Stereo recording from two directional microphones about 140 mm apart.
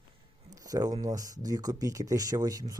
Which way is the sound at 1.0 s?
25° right (ahead or behind).